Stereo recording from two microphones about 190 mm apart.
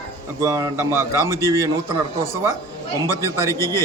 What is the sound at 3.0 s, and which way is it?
Speech, 15° left (ahead or behind).